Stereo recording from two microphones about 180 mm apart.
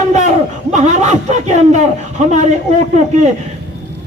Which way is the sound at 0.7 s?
40° right (ahead or behind).